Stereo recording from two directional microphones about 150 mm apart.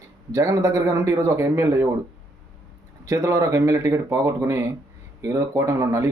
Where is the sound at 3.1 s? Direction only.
20° right (ahead or behind).